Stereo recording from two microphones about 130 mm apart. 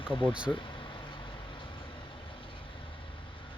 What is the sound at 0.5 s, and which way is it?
Vehicle, 40° left (ahead or behind).